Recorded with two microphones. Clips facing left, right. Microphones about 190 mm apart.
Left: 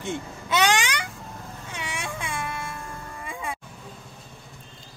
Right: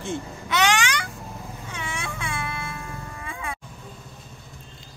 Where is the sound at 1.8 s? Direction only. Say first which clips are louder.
Even; 15° left (ahead or behind).